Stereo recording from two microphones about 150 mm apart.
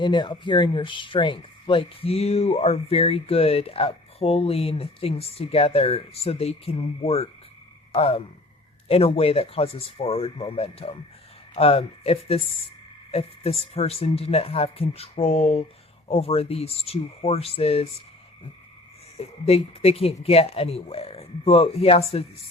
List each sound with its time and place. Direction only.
0.0 s speech: 30° left (ahead or behind)
19.1 s a woman's voice: 45° left (ahead or behind)